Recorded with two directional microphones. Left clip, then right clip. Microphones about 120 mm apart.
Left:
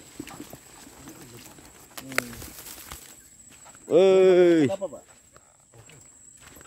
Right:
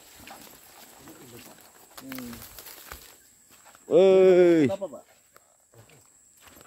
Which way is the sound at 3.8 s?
25° left (ahead or behind).